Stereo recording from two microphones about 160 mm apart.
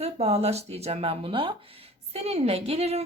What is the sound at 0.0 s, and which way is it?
A woman's voice, 40° right (ahead or behind).